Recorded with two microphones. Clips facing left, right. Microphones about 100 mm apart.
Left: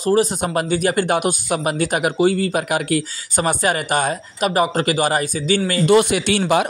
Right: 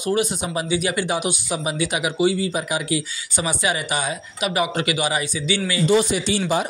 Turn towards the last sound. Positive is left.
turn(degrees=65)  # may be behind; listen again after turning